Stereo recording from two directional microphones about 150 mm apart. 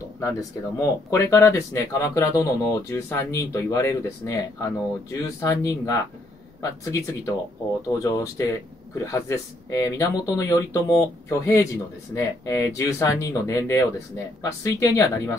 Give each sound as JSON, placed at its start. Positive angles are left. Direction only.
{"t": 0.2, "sound": "speech", "side_deg": 20}